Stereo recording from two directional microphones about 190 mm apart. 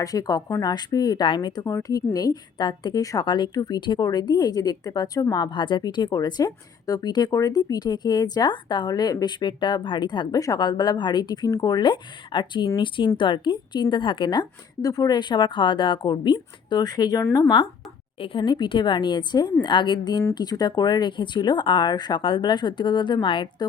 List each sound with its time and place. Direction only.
0.0 s speech: 20° left (ahead or behind)